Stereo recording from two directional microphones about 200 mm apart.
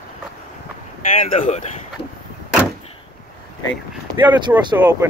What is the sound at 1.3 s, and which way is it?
Speech, 30° left (ahead or behind).